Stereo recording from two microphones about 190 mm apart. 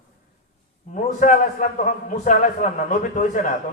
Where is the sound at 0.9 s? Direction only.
40° left (ahead or behind).